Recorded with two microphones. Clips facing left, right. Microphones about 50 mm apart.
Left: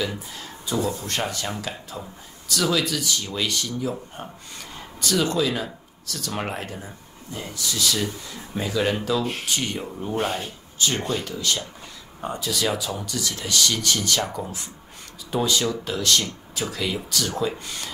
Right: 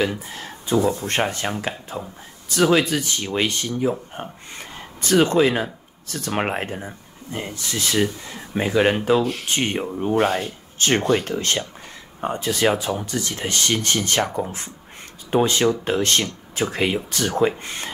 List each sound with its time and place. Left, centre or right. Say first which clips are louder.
0.3 s speech: right 6 dB; right